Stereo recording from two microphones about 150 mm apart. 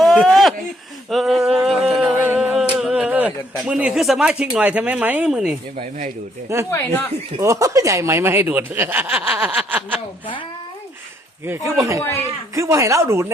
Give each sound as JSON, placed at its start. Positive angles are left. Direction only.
{"t": 0.0, "sound": "a sound", "side_deg": 0}
{"t": 3.7, "sound": "speech", "side_deg": -5}
{"t": 6.7, "sound": "speech", "side_deg": 15}
{"t": 7.3, "sound": "speech", "side_deg": -20}
{"t": 11.4, "sound": "speech", "side_deg": -15}